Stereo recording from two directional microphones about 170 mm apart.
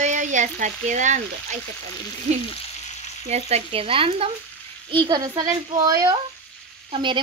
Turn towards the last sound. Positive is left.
turn(degrees=-30)  # may be behind; listen again after turning